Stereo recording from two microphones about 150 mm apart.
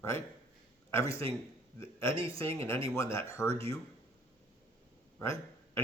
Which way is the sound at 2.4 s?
20° left (ahead or behind).